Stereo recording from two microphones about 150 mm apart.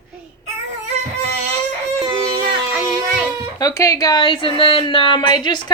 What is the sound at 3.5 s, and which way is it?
A woman's voice, 25° left (ahead or behind).